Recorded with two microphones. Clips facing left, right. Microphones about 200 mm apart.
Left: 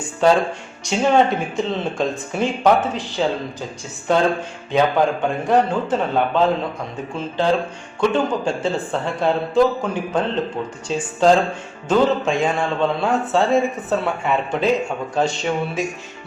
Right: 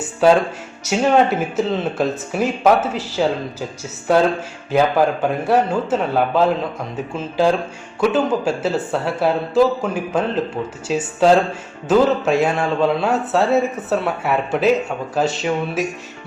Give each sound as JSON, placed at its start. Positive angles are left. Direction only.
{"t": 0.9, "sound": "a man's voice", "side_deg": -5}